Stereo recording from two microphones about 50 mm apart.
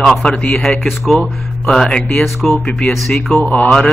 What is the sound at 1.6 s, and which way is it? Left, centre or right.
Speech, centre.